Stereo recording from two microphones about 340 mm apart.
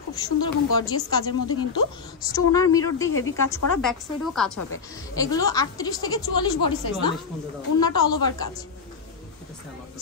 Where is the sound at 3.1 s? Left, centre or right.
Left.